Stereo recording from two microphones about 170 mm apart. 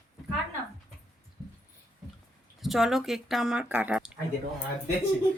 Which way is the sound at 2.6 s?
Centre (ahead or behind).